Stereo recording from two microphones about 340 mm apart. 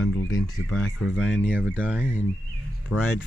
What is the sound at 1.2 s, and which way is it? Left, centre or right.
Speech, centre.